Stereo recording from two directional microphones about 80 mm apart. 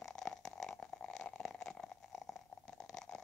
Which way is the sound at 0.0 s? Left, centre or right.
Centre.